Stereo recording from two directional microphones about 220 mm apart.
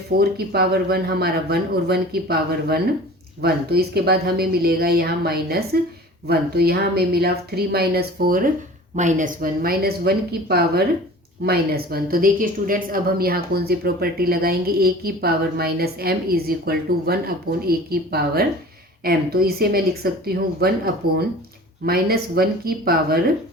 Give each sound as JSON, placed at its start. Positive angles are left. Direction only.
{"t": 0.2, "sound": "speech", "side_deg": -45}